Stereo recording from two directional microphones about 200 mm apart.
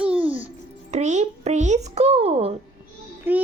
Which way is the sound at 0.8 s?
35° right (ahead or behind).